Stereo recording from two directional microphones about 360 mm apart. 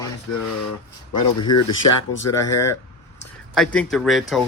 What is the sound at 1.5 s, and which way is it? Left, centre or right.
Speech, left.